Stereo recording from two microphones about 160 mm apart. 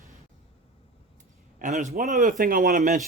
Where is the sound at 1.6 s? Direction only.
50° right (ahead or behind).